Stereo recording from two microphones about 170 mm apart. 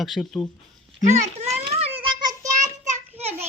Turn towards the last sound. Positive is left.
turn(degrees=-15)  # may be behind; listen again after turning